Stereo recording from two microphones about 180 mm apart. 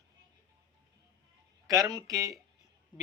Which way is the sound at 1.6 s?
20° right (ahead or behind).